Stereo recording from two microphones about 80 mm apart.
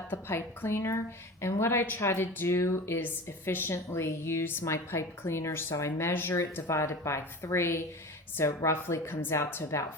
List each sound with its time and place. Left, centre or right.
0.1 s a woman's voice: left